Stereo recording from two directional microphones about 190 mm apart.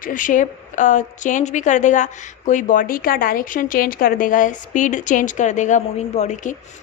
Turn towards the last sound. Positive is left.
turn(degrees=35)  # may be behind; listen again after turning